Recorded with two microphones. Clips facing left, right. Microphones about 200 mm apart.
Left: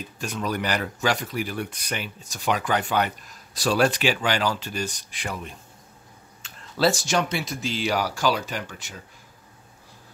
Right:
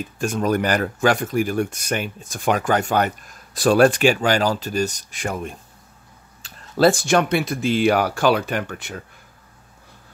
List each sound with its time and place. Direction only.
0.2 s speech: 50° right (ahead or behind)
6.4 s a sound: 35° right (ahead or behind)
6.8 s speech: 55° right (ahead or behind)